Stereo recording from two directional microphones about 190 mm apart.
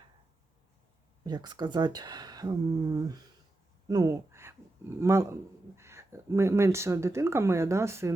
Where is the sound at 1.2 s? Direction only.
20° right (ahead or behind).